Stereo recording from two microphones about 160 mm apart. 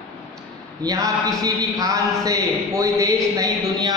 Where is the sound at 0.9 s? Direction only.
20° right (ahead or behind).